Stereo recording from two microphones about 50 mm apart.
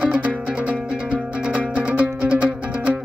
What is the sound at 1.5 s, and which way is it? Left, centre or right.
Music, right.